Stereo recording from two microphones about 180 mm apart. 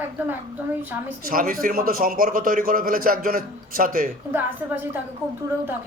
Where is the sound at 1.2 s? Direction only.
50° right (ahead or behind).